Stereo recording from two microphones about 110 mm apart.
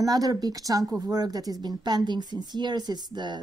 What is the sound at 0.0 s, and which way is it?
Speech, 35° right (ahead or behind).